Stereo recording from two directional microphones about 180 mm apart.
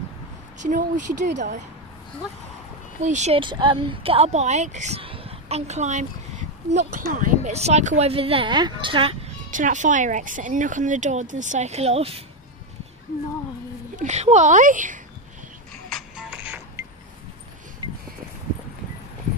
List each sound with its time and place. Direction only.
0.6 s speech: 45° right (ahead or behind)
3.0 s speech: 40° right (ahead or behind)
3.3 s a woman's voice: 25° right (ahead or behind)
9.5 s speech: 45° right (ahead or behind)
13.9 s speech: 40° right (ahead or behind)
15.9 s music: 5° right (ahead or behind)